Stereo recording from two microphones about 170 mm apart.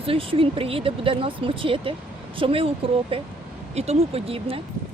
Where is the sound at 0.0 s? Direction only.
35° right (ahead or behind).